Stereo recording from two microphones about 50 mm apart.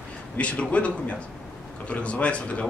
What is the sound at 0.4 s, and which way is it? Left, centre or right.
Speech, left.